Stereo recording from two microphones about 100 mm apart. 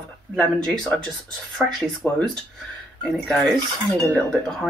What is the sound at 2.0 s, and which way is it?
Speech, 15° left (ahead or behind).